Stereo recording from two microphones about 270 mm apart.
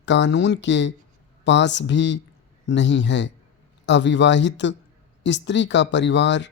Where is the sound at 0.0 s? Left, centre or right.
Left.